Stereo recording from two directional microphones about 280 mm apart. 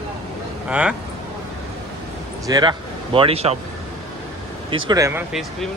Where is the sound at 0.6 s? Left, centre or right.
Centre.